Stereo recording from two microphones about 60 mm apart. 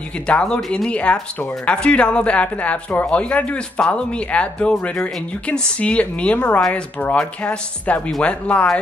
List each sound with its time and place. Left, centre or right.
0.3 s speech: centre